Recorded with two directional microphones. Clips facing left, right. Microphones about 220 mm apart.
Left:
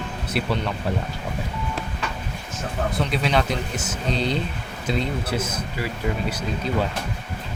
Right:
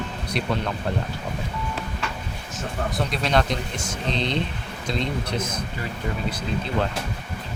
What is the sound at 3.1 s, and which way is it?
Speech, 5° left (ahead or behind).